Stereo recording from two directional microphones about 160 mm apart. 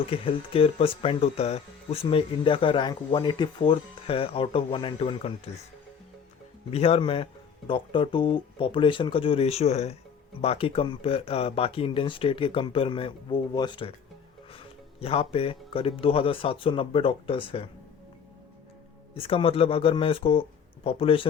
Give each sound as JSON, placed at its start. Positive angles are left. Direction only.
{"t": 0.0, "sound": "speech", "side_deg": 35}
{"t": 6.7, "sound": "speech", "side_deg": 40}
{"t": 19.1, "sound": "speech", "side_deg": 35}